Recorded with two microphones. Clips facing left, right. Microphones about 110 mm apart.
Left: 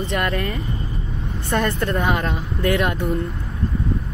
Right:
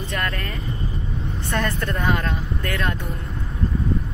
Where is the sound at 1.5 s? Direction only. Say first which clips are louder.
Left 4 dB; 25° left (ahead or behind).